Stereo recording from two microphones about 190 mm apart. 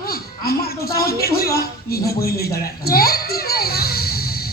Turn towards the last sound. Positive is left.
turn(degrees=55)  # may be behind; listen again after turning